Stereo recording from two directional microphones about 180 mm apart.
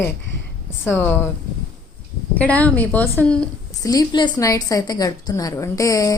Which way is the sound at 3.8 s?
20° left (ahead or behind).